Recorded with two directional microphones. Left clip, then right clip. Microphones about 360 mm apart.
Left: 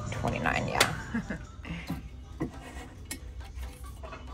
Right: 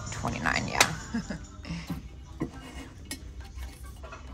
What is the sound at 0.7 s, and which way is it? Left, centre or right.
Music, centre.